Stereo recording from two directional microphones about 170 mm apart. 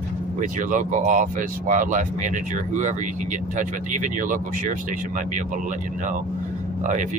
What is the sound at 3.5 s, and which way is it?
Speech, 45° right (ahead or behind).